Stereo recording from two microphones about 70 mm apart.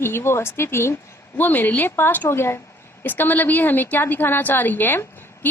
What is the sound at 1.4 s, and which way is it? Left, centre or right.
A woman's voice, left.